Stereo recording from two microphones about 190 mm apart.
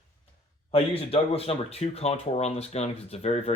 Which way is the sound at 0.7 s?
30° left (ahead or behind).